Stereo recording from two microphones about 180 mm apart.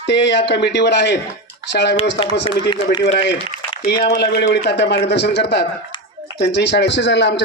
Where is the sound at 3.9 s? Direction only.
65° left (ahead or behind).